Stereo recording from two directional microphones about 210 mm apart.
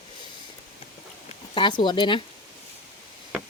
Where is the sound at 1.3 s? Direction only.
25° left (ahead or behind).